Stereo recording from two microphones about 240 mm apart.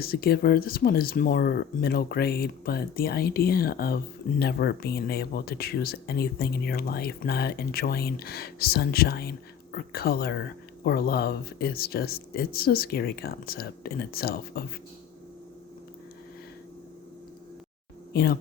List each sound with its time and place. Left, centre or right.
0.0 s speech: left
18.1 s speech: left